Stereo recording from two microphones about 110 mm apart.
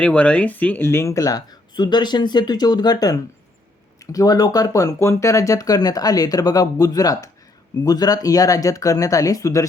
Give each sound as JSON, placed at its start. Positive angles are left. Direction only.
{"t": 0.0, "sound": "speech", "side_deg": 10}